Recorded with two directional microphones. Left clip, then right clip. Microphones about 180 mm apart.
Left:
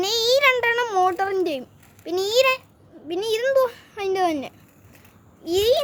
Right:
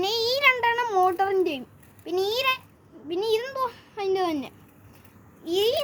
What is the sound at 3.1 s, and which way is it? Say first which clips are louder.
A child's voice: left 5 dB; 50° left (ahead or behind).